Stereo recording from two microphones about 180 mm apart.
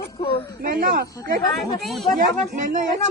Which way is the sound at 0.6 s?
50° right (ahead or behind).